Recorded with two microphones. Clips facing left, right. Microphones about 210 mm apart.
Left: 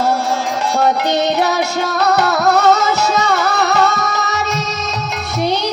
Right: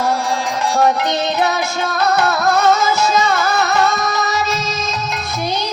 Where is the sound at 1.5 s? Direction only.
70° left (ahead or behind).